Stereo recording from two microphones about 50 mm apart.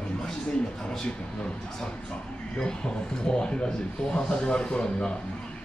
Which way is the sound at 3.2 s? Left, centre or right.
Centre.